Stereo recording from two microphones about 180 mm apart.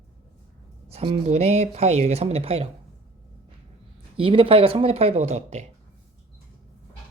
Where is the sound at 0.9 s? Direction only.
35° right (ahead or behind).